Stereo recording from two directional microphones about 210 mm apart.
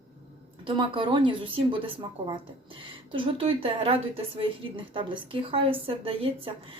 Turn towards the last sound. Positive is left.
turn(degrees=-25)  # may be behind; listen again after turning